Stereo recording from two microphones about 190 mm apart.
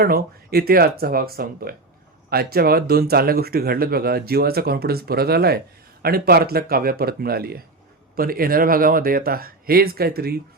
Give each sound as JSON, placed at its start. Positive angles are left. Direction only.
{"t": 0.0, "sound": "speech", "side_deg": -55}